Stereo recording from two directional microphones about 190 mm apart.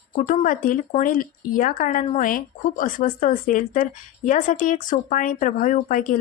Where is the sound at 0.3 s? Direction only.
45° left (ahead or behind).